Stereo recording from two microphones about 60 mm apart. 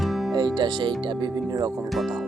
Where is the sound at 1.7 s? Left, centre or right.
Centre.